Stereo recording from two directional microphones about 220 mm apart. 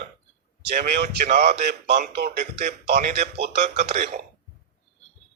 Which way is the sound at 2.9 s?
30° right (ahead or behind).